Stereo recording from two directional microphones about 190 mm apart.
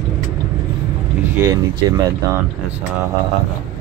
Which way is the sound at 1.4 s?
20° right (ahead or behind).